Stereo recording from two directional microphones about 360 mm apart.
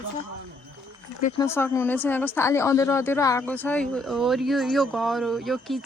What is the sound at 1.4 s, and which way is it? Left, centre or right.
A woman's voice, centre.